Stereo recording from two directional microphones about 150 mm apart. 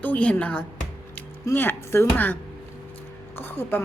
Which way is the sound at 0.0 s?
10° left (ahead or behind).